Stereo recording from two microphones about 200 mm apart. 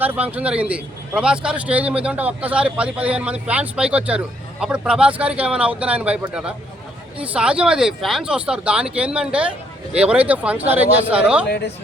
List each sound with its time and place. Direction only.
0.0 s a man's voice: 10° right (ahead or behind)
11.4 s speech: 55° left (ahead or behind)